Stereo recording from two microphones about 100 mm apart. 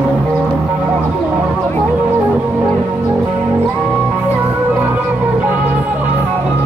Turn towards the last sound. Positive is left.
turn(degrees=-15)  # may be behind; listen again after turning